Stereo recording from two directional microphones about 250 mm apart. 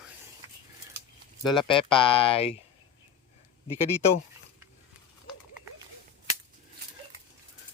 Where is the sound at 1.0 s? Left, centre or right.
Right.